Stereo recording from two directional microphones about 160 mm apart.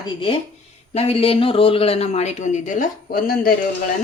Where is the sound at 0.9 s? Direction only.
40° left (ahead or behind); by 3.5 s 65° left (ahead or behind).